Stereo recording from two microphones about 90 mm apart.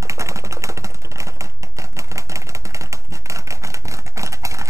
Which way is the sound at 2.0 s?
35° right (ahead or behind).